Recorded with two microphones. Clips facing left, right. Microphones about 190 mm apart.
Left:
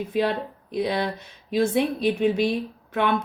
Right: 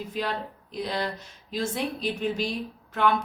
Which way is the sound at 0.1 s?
60° left (ahead or behind).